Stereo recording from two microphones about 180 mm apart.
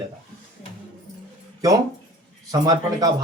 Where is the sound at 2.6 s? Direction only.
20° right (ahead or behind).